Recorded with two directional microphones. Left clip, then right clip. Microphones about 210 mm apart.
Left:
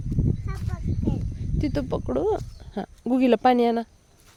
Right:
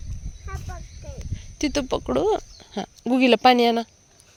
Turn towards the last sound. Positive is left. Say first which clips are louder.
# right 3 dB
turn(degrees=10)  # may be behind; listen again after turning